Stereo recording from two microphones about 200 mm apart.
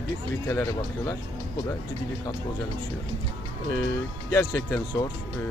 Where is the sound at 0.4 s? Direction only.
15° left (ahead or behind).